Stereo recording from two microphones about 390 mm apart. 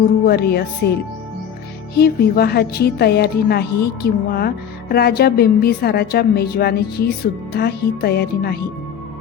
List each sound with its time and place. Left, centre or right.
0.0 s a woman's voice: left
2.0 s a woman's voice: left